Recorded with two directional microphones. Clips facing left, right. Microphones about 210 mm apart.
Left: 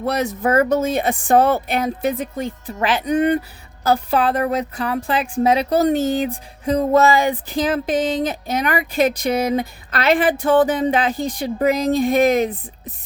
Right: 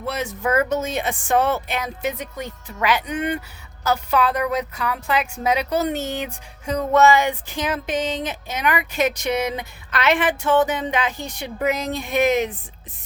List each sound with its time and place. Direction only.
0.0 s speech: 40° left (ahead or behind)